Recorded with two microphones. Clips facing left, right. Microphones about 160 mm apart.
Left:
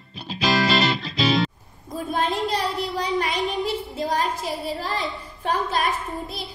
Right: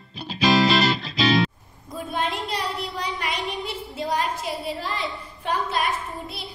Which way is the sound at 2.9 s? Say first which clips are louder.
Left 5 dB; 35° left (ahead or behind).